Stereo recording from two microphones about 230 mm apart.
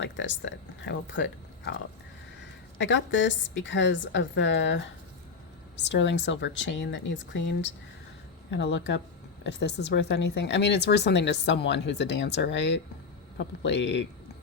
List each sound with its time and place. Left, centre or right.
0.0 s speech: left
2.7 s speech: left